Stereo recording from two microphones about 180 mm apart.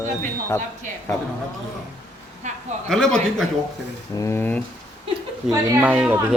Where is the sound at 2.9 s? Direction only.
5° left (ahead or behind).